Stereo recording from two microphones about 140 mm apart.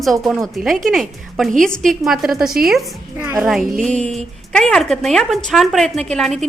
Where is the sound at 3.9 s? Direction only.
55° right (ahead or behind).